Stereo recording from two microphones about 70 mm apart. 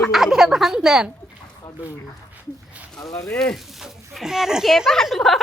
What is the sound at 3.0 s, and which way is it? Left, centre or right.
Speech, left.